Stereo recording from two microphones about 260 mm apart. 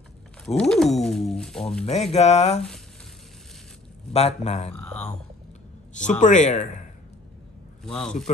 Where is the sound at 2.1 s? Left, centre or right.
Left.